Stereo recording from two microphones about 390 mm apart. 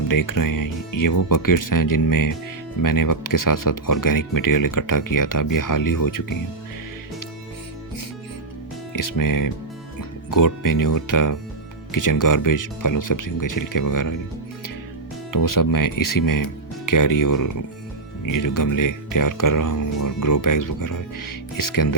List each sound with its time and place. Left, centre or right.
0.1 s speech: left
8.9 s speech: left
15.3 s speech: left